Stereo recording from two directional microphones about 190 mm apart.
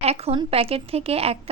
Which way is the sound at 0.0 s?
30° right (ahead or behind).